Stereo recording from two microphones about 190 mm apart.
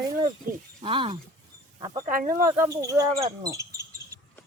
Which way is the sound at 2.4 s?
15° right (ahead or behind).